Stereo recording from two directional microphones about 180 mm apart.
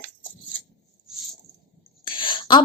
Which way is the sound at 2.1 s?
25° left (ahead or behind).